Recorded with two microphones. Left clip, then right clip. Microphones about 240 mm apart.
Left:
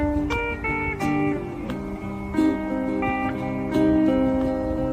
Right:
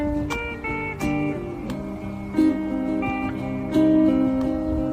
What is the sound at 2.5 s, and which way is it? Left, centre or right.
Music, centre.